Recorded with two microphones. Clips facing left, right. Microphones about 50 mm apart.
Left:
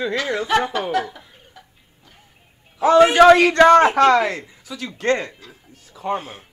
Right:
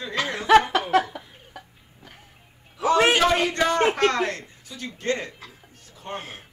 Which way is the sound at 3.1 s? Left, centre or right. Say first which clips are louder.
Left 10 dB; left.